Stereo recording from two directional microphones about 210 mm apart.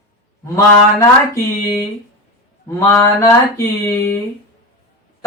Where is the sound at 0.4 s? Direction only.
15° left (ahead or behind).